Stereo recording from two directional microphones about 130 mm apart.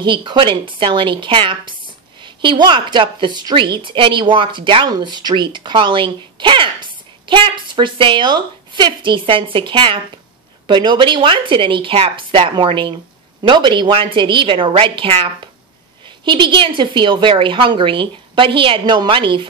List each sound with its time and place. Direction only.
0.0 s a woman's voice: 40° right (ahead or behind)